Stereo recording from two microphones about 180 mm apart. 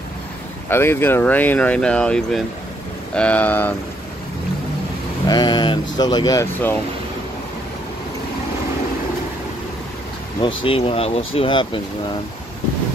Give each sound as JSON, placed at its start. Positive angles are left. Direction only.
{"t": 0.7, "sound": "speech", "side_deg": 15}
{"t": 5.3, "sound": "speech", "side_deg": 25}
{"t": 10.6, "sound": "speech", "side_deg": 30}